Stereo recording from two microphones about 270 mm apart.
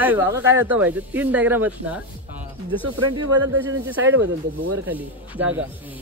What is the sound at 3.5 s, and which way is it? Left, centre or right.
Speech, right.